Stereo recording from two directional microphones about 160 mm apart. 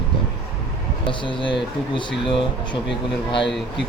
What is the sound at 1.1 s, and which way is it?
Speech, 30° left (ahead or behind).